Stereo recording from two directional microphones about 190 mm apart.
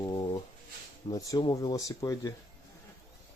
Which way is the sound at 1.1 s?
20° left (ahead or behind).